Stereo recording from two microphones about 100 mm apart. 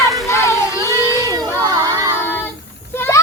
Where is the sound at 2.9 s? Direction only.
20° left (ahead or behind).